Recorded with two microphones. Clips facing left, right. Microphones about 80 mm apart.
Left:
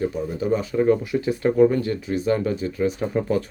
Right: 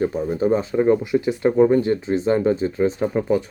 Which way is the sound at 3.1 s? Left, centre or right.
Centre.